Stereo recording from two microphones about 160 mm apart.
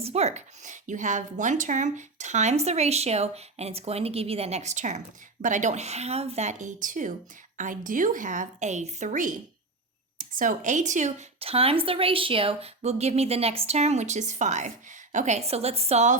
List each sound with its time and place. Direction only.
0.0 s a woman's voice: 40° right (ahead or behind)